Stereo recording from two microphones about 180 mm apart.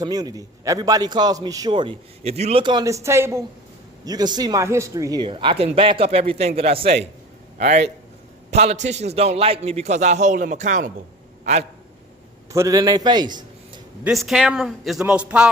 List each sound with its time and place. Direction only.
0.0 s a man's voice: 20° right (ahead or behind); by 11.6 s 40° right (ahead or behind)
12.5 s a man's voice: 20° right (ahead or behind)
14.0 s a man's voice: centre (ahead or behind)